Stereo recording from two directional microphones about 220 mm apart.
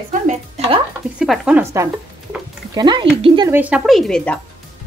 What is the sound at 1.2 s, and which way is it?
A woman's voice, centre (ahead or behind).